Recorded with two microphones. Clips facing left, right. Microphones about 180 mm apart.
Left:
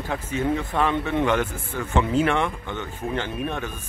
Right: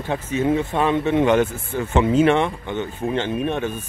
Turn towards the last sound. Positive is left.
turn(degrees=-20)  # may be behind; listen again after turning